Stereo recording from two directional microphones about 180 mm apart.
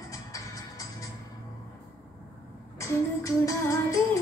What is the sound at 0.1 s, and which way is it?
Music, 20° left (ahead or behind).